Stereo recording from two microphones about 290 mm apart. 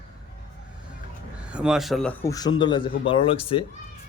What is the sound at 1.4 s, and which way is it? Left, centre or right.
Speech, centre.